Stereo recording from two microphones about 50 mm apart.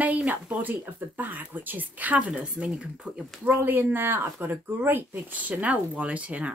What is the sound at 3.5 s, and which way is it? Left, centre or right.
Speech, right.